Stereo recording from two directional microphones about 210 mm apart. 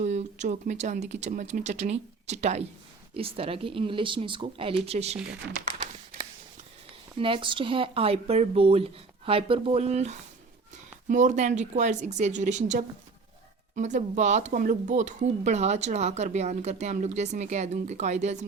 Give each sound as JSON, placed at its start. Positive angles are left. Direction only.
{"t": 0.0, "sound": "speech", "side_deg": -35}
{"t": 7.2, "sound": "speech", "side_deg": -25}